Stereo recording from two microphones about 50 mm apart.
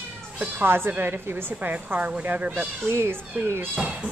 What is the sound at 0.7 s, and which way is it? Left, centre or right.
Speech, right.